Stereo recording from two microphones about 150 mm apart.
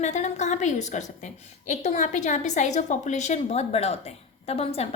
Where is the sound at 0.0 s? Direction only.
50° left (ahead or behind).